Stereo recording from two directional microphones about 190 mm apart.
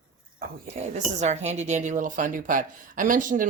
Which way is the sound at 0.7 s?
35° right (ahead or behind).